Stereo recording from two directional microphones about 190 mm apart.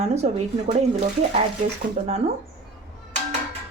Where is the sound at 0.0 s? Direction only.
35° right (ahead or behind).